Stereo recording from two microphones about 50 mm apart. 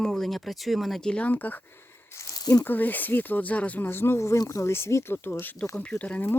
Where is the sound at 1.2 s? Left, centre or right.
Left.